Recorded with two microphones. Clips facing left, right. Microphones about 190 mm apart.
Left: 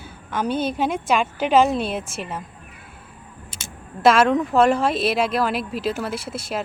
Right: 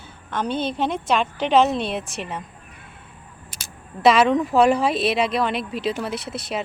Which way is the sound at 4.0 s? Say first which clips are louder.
Even; centre (ahead or behind).